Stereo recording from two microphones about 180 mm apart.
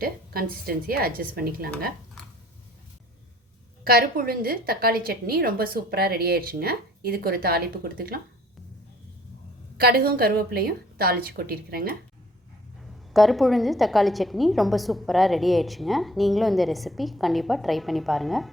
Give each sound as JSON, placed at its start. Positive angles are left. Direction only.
{"t": 0.0, "sound": "a woman's voice", "side_deg": -55}
{"t": 3.8, "sound": "a woman's voice", "side_deg": -55}
{"t": 9.7, "sound": "a woman's voice", "side_deg": -60}
{"t": 12.8, "sound": "a woman's voice", "side_deg": 0}